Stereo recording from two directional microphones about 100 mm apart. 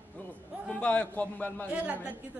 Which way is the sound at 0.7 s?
10° left (ahead or behind).